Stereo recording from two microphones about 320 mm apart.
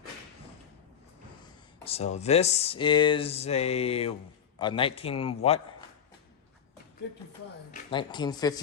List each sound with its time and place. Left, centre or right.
1.8 s a man's voice: centre
7.7 s a man's voice: centre